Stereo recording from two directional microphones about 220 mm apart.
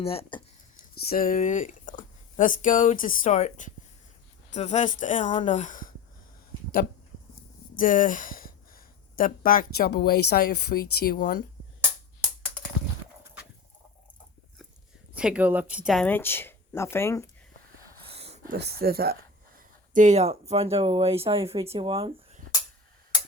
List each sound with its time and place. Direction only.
0.0 s speech: 25° left (ahead or behind)
1.0 s speech: 40° left (ahead or behind)
7.8 s speech: 40° left (ahead or behind)
15.1 s speech: 5° right (ahead or behind); by 17.2 s 10° left (ahead or behind)
18.0 s a sound: 25° right (ahead or behind)
18.4 s speech: 45° right (ahead or behind)
19.9 s speech: 35° right (ahead or behind)